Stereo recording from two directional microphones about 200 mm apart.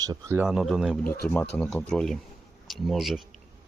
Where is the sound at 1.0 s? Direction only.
50° left (ahead or behind).